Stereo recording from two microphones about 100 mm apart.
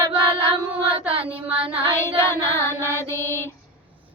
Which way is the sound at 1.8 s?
25° left (ahead or behind).